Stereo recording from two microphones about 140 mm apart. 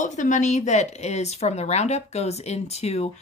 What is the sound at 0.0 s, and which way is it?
Speech, 60° left (ahead or behind).